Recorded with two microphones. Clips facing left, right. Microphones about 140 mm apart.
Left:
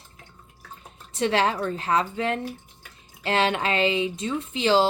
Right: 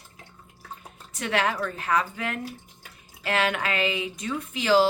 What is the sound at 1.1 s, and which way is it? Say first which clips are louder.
A woman's voice: left 3 dB; 30° left (ahead or behind).